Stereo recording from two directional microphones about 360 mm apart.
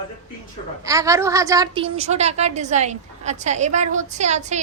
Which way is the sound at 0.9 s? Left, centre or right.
Centre.